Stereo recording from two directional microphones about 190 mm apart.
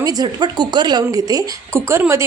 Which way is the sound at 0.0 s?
20° right (ahead or behind).